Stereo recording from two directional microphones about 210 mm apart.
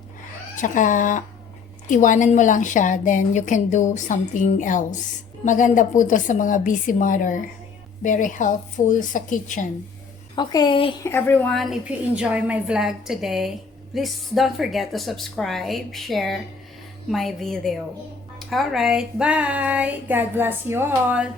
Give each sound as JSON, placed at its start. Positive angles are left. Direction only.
{"t": 0.5, "sound": "a woman's voice", "side_deg": 40}
{"t": 10.3, "sound": "a woman's voice", "side_deg": 20}
{"t": 11.0, "sound": "a woman's voice", "side_deg": 10}